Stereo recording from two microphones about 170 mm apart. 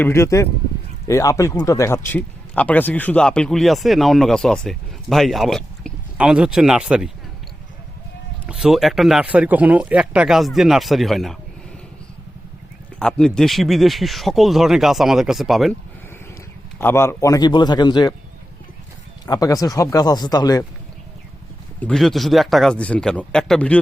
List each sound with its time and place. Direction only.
0.0 s speech: 15° left (ahead or behind); by 7.1 s 5° right (ahead or behind)
8.4 s speech: 5° right (ahead or behind)
13.0 s speech: 5° left (ahead or behind)
16.7 s speech: 15° left (ahead or behind)
19.2 s speech: 20° left (ahead or behind)
21.8 s speech: 5° left (ahead or behind)